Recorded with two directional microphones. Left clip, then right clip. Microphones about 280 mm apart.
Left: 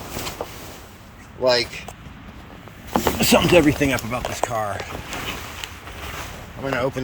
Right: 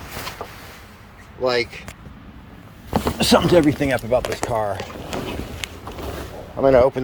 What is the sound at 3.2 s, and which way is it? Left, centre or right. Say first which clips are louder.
Speech: right 2 dB; right.